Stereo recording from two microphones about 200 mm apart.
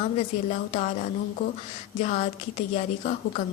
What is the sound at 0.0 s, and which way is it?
A woman's voice, 35° left (ahead or behind).